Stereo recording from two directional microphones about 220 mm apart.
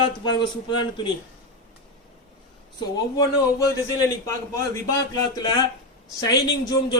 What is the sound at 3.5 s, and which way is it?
Speech, 15° left (ahead or behind).